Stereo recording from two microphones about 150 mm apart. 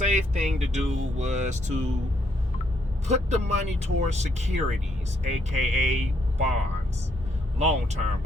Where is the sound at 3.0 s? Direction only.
50° right (ahead or behind).